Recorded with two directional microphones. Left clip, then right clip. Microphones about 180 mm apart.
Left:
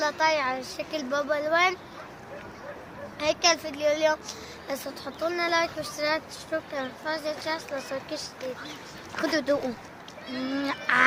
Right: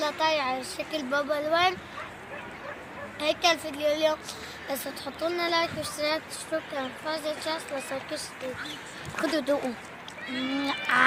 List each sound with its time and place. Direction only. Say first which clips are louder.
0.0 s speech: left 2 dB; centre (ahead or behind)
3.2 s speech: left 1 dB; centre (ahead or behind)
9.1 s speech: left 1 dB; 5° left (ahead or behind)
10.3 s speech: even; 30° left (ahead or behind)